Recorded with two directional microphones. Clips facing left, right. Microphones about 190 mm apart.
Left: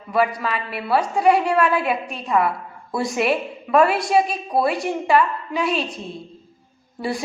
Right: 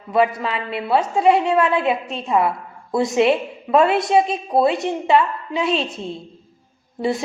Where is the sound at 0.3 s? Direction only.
25° right (ahead or behind).